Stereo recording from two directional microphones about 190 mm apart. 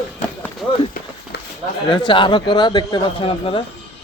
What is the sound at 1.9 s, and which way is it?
Speech, 25° left (ahead or behind).